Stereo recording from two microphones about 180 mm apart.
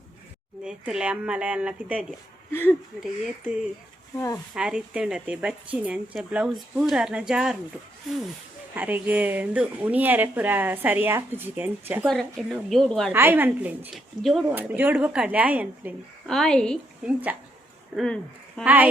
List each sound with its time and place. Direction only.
0.6 s a woman's voice: 5° right (ahead or behind)
2.5 s speech: 10° left (ahead or behind)
4.5 s a woman's voice: 5° right (ahead or behind)
8.7 s speech: 10° right (ahead or behind)
12.0 s a woman's voice: centre (ahead or behind)
13.1 s a woman's voice: 10° right (ahead or behind)
14.5 s speech: 10° right (ahead or behind)
16.2 s a woman's voice: 5° left (ahead or behind)
17.1 s speech: 10° right (ahead or behind)
17.9 s speech: 5° left (ahead or behind)
18.6 s speech: 10° right (ahead or behind)